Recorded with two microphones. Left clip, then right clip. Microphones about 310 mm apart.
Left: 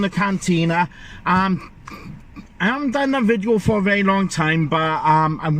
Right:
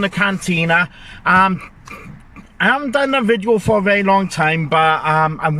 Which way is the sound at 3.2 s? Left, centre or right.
Right.